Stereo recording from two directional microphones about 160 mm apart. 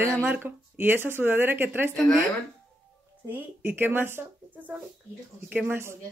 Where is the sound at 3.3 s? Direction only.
10° right (ahead or behind).